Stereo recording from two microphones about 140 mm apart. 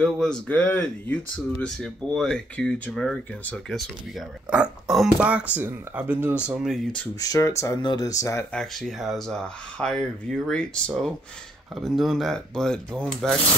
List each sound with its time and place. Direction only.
0.0 s speech: 5° left (ahead or behind)
4.5 s speech: 5° right (ahead or behind)
6.4 s speech: centre (ahead or behind)
7.2 s speech: 25° left (ahead or behind)
8.5 s speech: centre (ahead or behind)